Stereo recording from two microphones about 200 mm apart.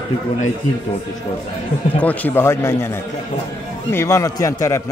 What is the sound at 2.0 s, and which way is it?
A man's voice, 10° left (ahead or behind).